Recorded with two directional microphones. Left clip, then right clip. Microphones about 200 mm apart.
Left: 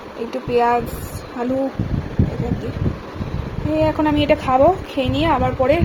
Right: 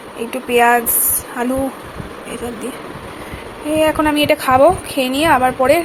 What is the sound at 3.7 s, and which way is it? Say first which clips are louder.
A woman's voice: right 3 dB; centre (ahead or behind).